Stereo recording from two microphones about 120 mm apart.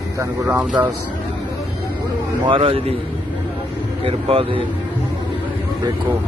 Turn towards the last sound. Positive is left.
turn(degrees=-45)  # may be behind; listen again after turning